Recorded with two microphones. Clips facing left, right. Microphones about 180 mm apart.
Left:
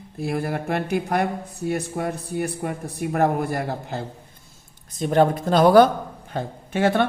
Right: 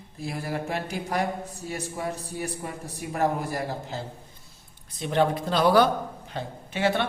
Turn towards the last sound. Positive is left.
turn(degrees=50)  # may be behind; listen again after turning